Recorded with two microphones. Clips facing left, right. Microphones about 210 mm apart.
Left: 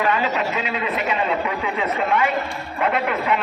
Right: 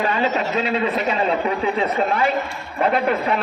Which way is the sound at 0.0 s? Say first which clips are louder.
Right 1 dB; 35° right (ahead or behind).